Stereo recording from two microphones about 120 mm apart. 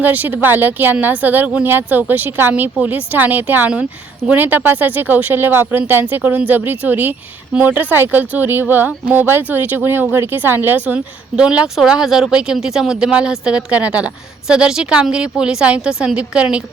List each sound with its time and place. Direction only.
0.0 s speech: 15° right (ahead or behind)